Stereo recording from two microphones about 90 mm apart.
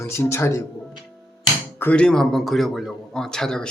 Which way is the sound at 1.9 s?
10° left (ahead or behind).